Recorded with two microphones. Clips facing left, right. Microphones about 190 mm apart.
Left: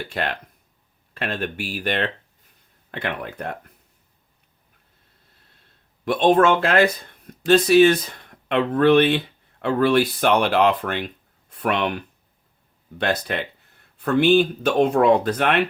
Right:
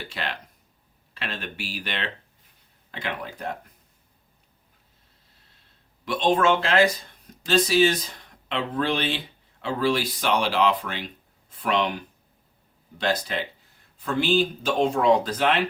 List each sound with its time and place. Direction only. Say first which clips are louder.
0.1 s speech: left 6 dB; 50° left (ahead or behind)
6.1 s speech: left 5 dB; 55° left (ahead or behind)